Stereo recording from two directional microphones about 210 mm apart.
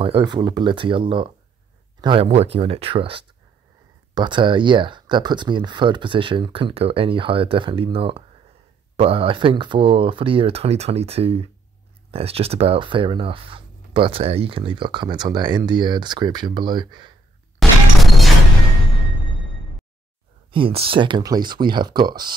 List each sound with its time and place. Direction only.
0.0 s speech: 20° right (ahead or behind)
17.6 s smash: centre (ahead or behind)
20.5 s speech: 25° right (ahead or behind)